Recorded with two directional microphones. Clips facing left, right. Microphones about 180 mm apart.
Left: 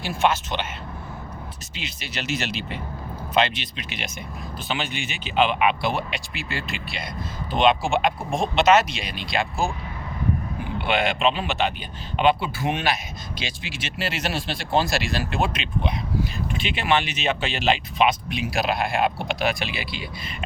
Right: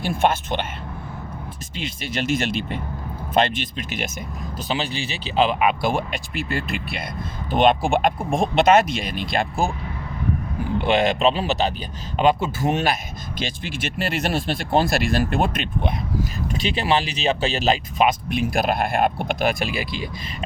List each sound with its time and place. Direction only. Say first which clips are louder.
0.0 s speech: right 2 dB; 50° right (ahead or behind)
1.7 s speech: right 6 dB; 50° right (ahead or behind)
4.7 s speech: right 3 dB; 35° right (ahead or behind)
16.5 s speech: right 3 dB; 40° right (ahead or behind)